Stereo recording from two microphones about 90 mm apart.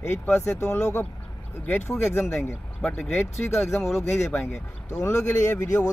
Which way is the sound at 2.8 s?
10° left (ahead or behind).